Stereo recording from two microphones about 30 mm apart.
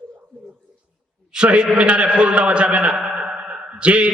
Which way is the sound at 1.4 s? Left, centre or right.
Right.